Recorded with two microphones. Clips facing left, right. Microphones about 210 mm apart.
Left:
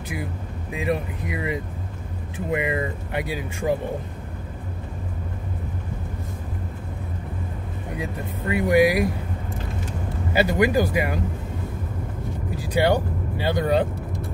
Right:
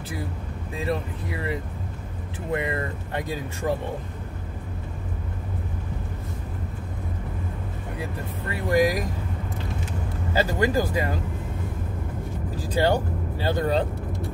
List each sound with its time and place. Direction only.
0.7 s speech: 15° left (ahead or behind)
8.5 s speech: 15° left (ahead or behind)
10.3 s speech: 15° left (ahead or behind)
12.6 s speech: 10° left (ahead or behind)